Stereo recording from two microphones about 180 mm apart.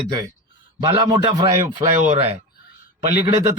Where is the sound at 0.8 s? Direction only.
20° right (ahead or behind).